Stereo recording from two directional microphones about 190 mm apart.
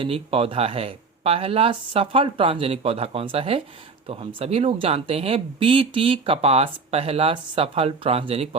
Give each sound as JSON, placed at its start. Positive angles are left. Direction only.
{"t": 0.0, "sound": "speech", "side_deg": -30}